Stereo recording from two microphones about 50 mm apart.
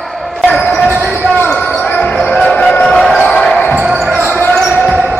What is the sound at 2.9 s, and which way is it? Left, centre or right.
Basketball bounce, centre.